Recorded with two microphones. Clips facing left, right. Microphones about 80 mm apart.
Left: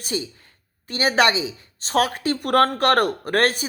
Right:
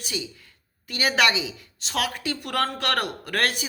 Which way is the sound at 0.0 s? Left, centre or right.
Left.